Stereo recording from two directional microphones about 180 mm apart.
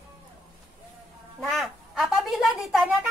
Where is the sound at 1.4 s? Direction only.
Centre (ahead or behind).